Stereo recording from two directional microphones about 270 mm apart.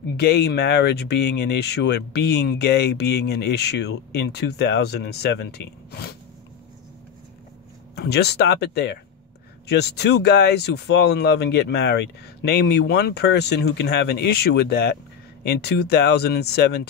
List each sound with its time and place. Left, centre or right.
0.2 s speech: left
7.9 s speech: left